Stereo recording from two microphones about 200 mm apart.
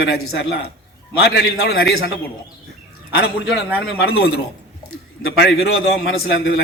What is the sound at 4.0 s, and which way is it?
Speech, 55° left (ahead or behind).